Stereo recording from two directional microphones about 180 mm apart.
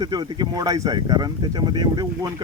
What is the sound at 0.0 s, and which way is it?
Speech, 20° right (ahead or behind).